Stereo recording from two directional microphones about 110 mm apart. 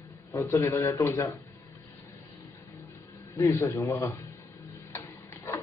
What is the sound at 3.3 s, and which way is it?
Speech, 25° left (ahead or behind).